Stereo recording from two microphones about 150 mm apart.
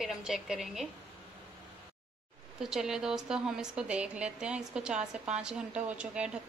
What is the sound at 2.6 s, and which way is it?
A woman's voice, 5° right (ahead or behind).